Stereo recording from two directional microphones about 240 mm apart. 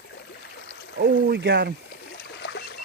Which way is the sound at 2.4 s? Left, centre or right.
Left.